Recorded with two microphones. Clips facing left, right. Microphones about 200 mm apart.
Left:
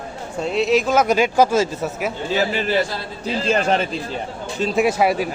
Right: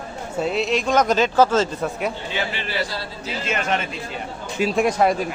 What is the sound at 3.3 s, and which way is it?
Speech, 35° left (ahead or behind).